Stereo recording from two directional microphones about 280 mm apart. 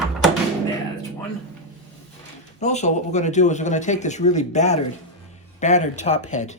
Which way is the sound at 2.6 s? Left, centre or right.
Left.